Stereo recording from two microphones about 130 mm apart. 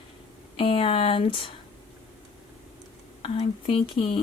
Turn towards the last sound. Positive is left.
turn(degrees=40)  # may be behind; listen again after turning